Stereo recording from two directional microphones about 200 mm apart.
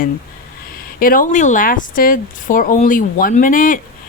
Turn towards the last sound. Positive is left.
turn(degrees=40)  # may be behind; listen again after turning